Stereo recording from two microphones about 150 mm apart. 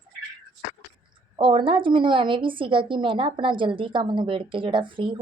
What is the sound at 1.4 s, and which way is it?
A woman's voice, 35° right (ahead or behind).